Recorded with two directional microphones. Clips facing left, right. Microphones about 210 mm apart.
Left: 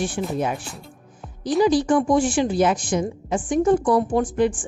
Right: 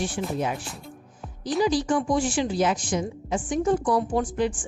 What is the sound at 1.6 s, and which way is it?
A woman's voice, 50° left (ahead or behind).